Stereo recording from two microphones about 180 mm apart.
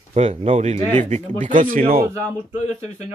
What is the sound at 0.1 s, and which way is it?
Speech, 35° right (ahead or behind).